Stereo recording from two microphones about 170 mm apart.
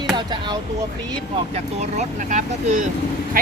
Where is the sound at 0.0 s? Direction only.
25° right (ahead or behind).